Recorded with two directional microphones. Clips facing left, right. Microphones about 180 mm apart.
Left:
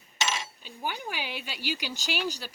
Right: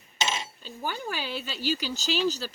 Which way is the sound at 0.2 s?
20° right (ahead or behind).